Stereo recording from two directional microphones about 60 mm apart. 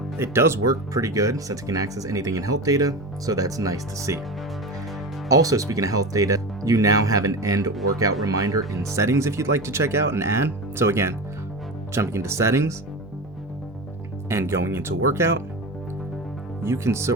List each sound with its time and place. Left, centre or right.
0.2 s speech: right
0.7 s speech: right
5.3 s speech: right
14.3 s speech: right
16.6 s speech: right